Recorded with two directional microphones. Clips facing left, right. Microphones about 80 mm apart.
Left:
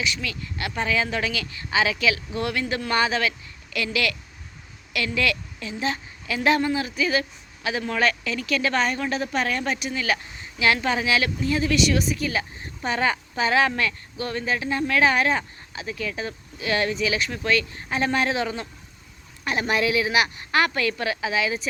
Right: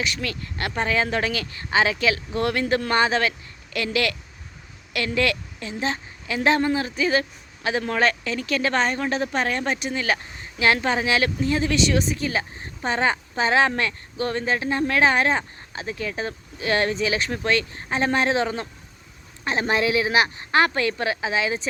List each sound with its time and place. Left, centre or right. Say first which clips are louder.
0.0 s a woman's voice: right 1 dB; right